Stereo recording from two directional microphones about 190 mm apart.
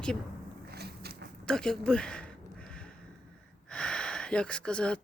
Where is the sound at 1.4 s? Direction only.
5° left (ahead or behind).